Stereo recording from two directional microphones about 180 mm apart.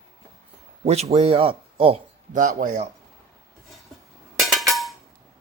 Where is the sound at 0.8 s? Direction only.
35° right (ahead or behind).